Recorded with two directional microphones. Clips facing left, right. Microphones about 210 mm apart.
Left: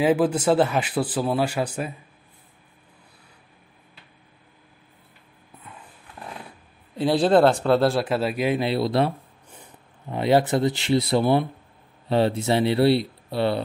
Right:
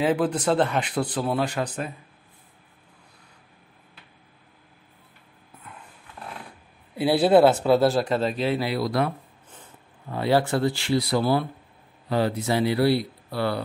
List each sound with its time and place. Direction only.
0.0 s speech: 5° left (ahead or behind)
7.0 s speech: 10° right (ahead or behind); by 9.1 s 25° left (ahead or behind)
9.5 s speech: 15° left (ahead or behind)